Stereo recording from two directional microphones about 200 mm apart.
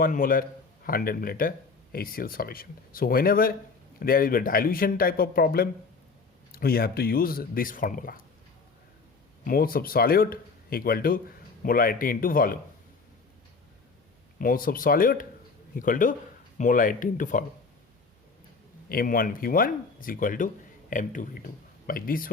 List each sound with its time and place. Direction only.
0.0 s speech: 45° left (ahead or behind)
9.4 s speech: 45° left (ahead or behind)
14.3 s speech: 45° left (ahead or behind)
18.9 s speech: 45° left (ahead or behind)